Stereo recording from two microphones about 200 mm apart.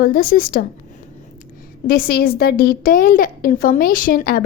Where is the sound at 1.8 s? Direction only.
50° left (ahead or behind).